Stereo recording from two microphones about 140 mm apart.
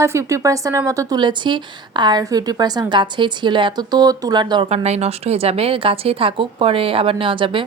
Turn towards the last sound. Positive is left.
turn(degrees=-35)  # may be behind; listen again after turning